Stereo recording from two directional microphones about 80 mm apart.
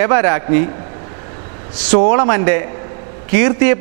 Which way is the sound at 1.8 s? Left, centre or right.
Centre.